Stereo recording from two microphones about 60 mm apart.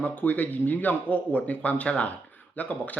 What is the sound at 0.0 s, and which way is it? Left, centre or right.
Speech, left.